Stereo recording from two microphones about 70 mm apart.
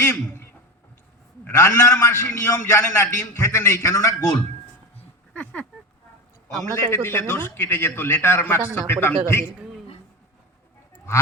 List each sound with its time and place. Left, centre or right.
0.0 s a man's voice: left
1.5 s a man's voice: left
5.3 s speech: left
6.7 s a man's voice: left